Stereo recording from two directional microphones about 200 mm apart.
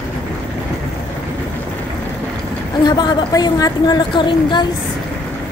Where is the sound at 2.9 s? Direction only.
20° left (ahead or behind).